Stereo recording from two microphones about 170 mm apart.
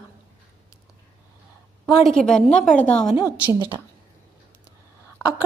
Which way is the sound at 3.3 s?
10° right (ahead or behind).